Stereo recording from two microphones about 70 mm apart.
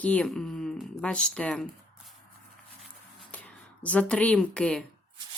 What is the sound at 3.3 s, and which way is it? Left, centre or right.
Speech, left.